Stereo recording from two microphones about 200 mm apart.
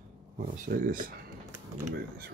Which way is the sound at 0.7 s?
45° right (ahead or behind).